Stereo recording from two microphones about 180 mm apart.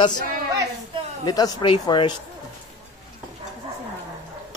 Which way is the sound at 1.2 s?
20° left (ahead or behind).